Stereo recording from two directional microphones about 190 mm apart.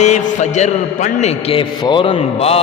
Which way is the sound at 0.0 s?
40° left (ahead or behind).